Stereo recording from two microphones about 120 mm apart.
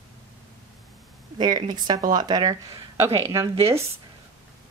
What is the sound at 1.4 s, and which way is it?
Speech, 35° right (ahead or behind).